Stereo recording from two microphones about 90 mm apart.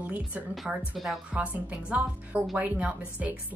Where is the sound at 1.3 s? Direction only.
15° right (ahead or behind).